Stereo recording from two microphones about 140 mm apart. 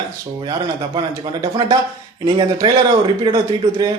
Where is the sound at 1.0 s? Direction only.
30° right (ahead or behind).